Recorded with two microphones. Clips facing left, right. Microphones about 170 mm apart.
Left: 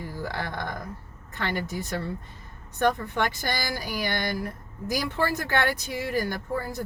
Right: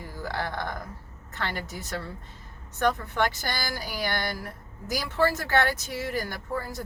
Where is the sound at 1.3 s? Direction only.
15° left (ahead or behind).